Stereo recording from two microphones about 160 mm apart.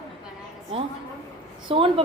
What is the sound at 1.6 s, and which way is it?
Speech, 35° right (ahead or behind).